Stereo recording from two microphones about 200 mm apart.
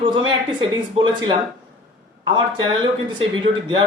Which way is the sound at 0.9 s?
25° right (ahead or behind).